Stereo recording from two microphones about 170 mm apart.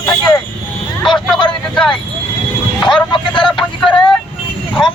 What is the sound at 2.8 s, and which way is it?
Speech, 30° left (ahead or behind).